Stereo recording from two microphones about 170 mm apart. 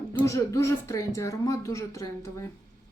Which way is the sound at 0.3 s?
20° left (ahead or behind).